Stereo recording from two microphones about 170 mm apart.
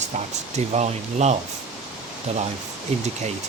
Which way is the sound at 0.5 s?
40° right (ahead or behind).